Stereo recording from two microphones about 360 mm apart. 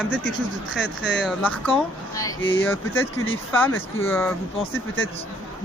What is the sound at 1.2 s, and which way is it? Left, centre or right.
Speech, centre.